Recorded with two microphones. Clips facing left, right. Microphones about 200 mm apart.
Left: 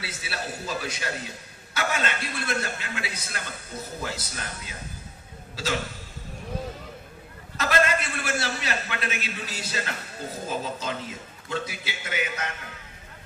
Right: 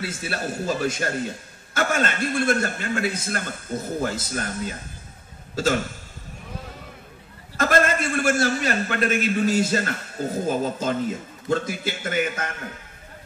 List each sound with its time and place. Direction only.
0.0 s a man's voice: 50° right (ahead or behind)
7.5 s a man's voice: 50° right (ahead or behind)